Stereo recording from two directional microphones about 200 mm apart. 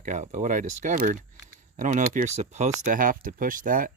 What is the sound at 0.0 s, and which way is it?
Speech, 40° right (ahead or behind).